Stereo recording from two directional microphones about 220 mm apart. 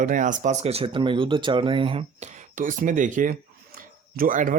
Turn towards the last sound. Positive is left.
turn(degrees=-35)  # may be behind; listen again after turning